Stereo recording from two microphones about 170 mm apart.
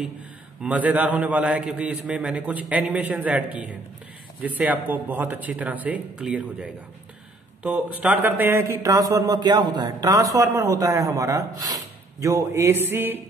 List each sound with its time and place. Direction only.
0.6 s a man's voice: 10° right (ahead or behind)